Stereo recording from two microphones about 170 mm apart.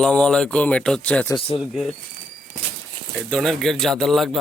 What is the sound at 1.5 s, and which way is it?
Speech, 30° left (ahead or behind).